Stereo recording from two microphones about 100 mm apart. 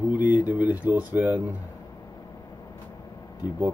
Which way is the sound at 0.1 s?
15° right (ahead or behind).